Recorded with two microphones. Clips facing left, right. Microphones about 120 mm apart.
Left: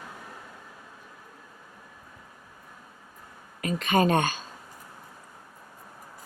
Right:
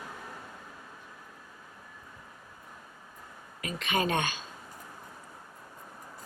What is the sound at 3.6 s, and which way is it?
Speech, 40° left (ahead or behind).